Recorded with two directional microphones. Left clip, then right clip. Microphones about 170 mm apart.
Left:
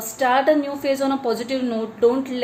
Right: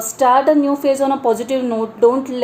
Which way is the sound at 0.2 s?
35° right (ahead or behind).